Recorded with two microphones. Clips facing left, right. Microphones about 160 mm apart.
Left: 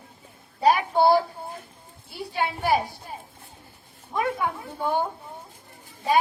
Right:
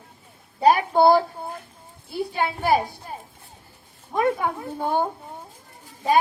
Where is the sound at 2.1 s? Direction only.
45° right (ahead or behind).